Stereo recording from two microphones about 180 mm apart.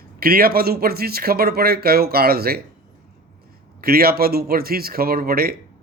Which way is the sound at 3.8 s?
55° right (ahead or behind).